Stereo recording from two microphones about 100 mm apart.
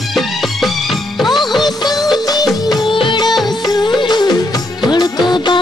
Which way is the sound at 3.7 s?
45° left (ahead or behind).